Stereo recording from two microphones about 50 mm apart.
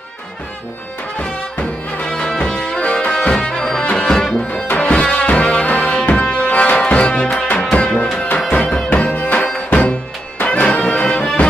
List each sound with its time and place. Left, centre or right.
2.0 s music: left
3.1 s music: centre